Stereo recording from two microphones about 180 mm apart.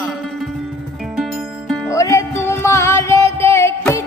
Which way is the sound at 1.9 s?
15° left (ahead or behind).